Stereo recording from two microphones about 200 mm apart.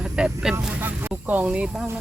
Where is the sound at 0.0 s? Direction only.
5° right (ahead or behind).